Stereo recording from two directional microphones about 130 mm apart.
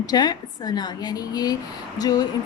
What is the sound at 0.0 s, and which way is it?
Speech, 30° left (ahead or behind).